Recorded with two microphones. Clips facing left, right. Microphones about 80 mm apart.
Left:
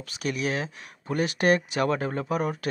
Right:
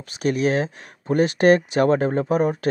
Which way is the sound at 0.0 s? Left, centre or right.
Right.